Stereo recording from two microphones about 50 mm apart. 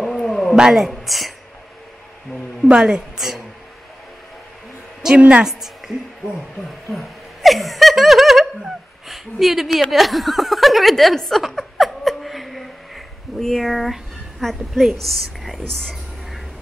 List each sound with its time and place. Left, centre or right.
0.0 s cat: centre
0.6 s a woman's voice: centre
0.8 s a woman's voice: centre
2.7 s a woman's voice: centre
3.2 s speech: centre
5.1 s a woman's voice: right
5.4 s a woman's voice: centre
6.9 s laughter: centre
14.4 s a woman's voice: centre